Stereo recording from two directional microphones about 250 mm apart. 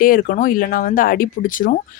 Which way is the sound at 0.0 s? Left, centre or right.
Left.